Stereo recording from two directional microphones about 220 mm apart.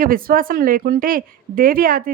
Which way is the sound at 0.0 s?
40° right (ahead or behind).